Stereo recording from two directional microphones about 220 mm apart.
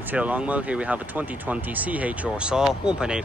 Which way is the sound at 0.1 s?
5° right (ahead or behind).